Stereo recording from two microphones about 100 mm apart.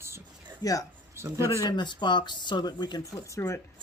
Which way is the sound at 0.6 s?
35° left (ahead or behind).